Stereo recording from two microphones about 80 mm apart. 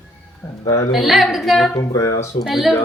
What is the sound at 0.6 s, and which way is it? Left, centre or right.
Speech, left.